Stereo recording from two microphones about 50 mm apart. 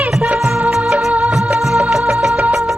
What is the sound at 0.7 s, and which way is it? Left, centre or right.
Music of bollywood, centre.